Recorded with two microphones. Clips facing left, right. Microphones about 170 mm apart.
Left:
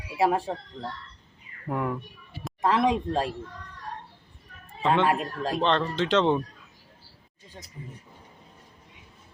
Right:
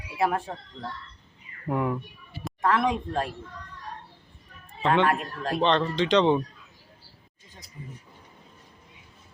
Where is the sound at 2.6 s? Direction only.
25° left (ahead or behind).